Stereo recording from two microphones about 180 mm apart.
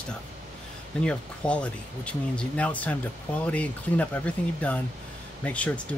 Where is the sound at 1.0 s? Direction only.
5° left (ahead or behind).